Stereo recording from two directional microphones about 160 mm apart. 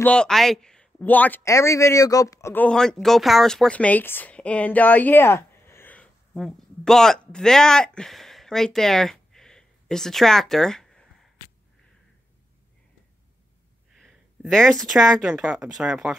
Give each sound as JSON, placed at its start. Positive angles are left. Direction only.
{"t": 0.0, "sound": "speech", "side_deg": 5}
{"t": 13.9, "sound": "speech", "side_deg": 0}